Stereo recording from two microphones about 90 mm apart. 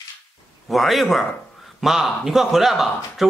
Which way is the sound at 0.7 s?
Centre (ahead or behind).